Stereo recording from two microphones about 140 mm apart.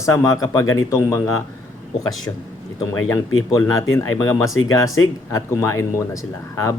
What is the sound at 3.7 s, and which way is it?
Speech, 20° left (ahead or behind).